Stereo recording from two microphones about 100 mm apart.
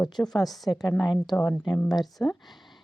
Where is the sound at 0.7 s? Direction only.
40° left (ahead or behind).